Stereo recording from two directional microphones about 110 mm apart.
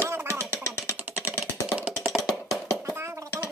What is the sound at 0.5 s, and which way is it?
Cat, 25° left (ahead or behind).